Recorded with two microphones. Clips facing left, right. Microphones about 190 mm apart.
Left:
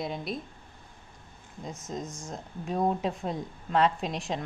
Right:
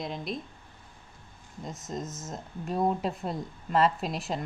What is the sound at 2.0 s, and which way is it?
Speech, 20° right (ahead or behind).